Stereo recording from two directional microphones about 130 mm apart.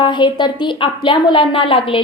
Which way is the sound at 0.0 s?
35° left (ahead or behind).